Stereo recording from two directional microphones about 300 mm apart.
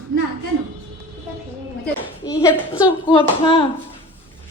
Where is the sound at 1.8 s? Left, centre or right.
Centre.